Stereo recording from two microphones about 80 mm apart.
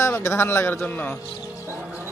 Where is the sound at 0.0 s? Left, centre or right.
Left.